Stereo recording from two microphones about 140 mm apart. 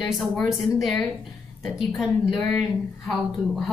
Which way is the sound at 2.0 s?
Centre (ahead or behind).